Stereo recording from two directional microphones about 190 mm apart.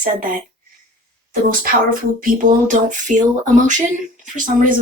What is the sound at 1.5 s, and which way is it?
Speech, 50° right (ahead or behind).